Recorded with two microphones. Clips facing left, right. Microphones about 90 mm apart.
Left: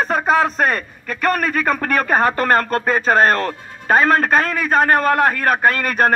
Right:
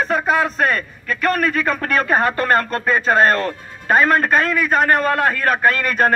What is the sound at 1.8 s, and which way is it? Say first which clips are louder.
Speech: even; 20° left (ahead or behind).